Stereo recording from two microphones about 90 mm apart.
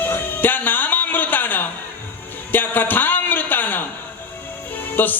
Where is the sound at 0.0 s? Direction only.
20° left (ahead or behind).